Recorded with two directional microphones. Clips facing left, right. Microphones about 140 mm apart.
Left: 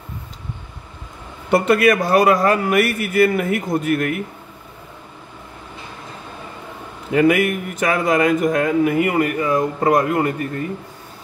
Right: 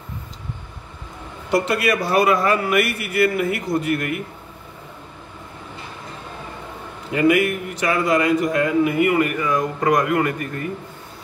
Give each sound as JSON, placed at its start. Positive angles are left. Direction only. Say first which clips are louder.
{"t": 1.5, "sound": "a man's voice", "louder": "left 5 dB", "side_deg": 55}
{"t": 7.2, "sound": "a man's voice", "louder": "left 2 dB", "side_deg": 50}
{"t": 9.2, "sound": "speech", "louder": "left 2 dB", "side_deg": 30}